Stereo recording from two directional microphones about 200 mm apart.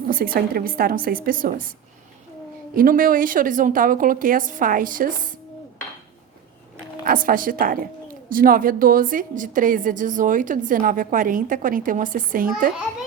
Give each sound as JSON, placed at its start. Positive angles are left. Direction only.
{"t": 0.1, "sound": "a woman's voice", "side_deg": -45}
{"t": 2.7, "sound": "a woman's voice", "side_deg": -45}
{"t": 7.0, "sound": "a woman's voice", "side_deg": -45}